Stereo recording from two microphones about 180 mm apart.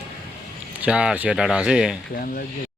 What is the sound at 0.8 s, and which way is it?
Speech, 5° right (ahead or behind).